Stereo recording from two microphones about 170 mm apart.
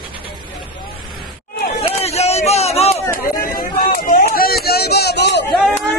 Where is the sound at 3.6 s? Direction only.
60° left (ahead or behind); by 5.4 s 80° left.